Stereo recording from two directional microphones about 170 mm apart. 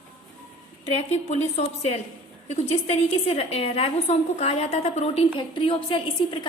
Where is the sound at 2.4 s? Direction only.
40° left (ahead or behind).